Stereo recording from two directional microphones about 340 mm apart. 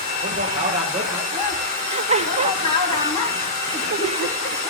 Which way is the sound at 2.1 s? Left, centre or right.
Centre.